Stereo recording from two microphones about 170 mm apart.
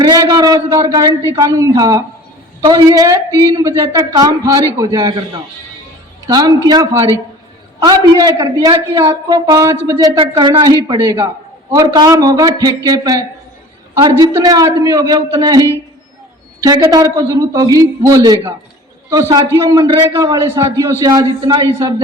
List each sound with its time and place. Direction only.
0.0 s a woman's voice: 25° right (ahead or behind)
6.2 s a woman's voice: 20° right (ahead or behind)
16.6 s a woman's voice: 20° right (ahead or behind)